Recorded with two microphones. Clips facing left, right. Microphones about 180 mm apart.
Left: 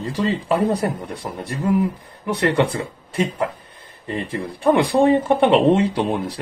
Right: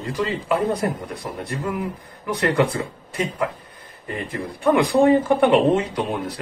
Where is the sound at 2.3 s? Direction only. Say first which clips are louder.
Left 1 dB; 30° left (ahead or behind).